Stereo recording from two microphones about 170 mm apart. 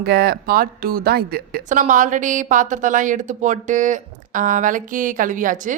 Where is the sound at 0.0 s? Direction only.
70° right (ahead or behind).